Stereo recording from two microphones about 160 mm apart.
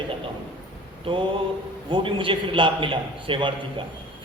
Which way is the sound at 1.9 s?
30° right (ahead or behind).